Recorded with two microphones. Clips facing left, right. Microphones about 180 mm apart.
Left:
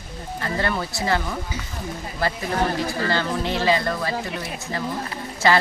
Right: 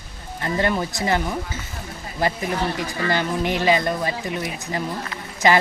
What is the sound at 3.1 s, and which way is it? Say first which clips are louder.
Speech: right 5 dB; 15° right (ahead or behind).